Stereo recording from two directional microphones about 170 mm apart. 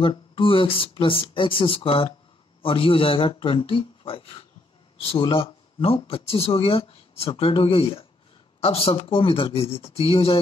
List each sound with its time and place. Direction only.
0.0 s speech: 30° left (ahead or behind)